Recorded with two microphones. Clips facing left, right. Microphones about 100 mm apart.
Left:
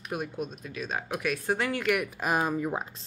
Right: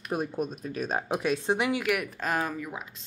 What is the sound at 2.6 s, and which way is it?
Speech, 35° left (ahead or behind).